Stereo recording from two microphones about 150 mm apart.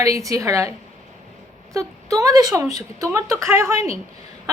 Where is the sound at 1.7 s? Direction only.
20° right (ahead or behind).